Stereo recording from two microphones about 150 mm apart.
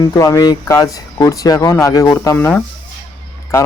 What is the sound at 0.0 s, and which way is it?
A man's voice, 20° left (ahead or behind).